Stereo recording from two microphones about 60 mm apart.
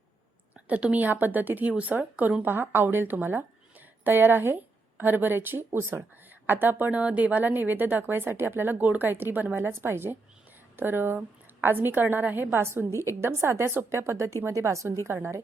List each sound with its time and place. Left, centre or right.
0.5 s a woman's voice: right
9.6 s a woman's voice: right
15.0 s speech: right